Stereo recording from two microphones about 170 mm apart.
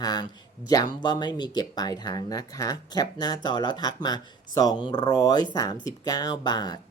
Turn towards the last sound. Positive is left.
turn(degrees=25)  # may be behind; listen again after turning